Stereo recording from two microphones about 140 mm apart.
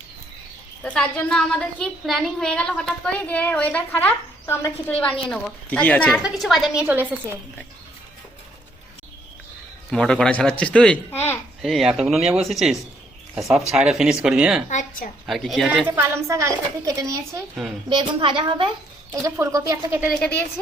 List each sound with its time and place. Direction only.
0.8 s a woman's voice: 10° left (ahead or behind)
6.2 s speech: centre (ahead or behind)
6.8 s a woman's voice: 15° right (ahead or behind)
9.9 s a woman's voice: 5° left (ahead or behind)
11.6 s speech: centre (ahead or behind)
14.7 s a woman's voice: 70° left (ahead or behind)
15.3 s speech: centre (ahead or behind)
15.9 s speech: 15° right (ahead or behind)
17.8 s a woman's voice: 35° right (ahead or behind)
19.2 s speech: 25° right (ahead or behind)
20.1 s a woman's voice: 10° left (ahead or behind)